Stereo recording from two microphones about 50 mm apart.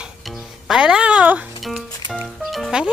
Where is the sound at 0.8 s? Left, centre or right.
Centre.